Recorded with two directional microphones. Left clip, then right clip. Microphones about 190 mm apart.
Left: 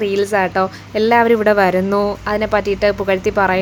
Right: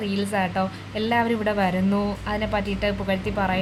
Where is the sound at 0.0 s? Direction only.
40° left (ahead or behind).